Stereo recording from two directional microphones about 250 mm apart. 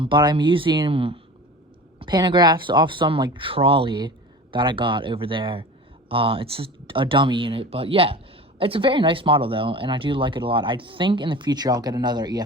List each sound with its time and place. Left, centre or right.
0.0 s speech: centre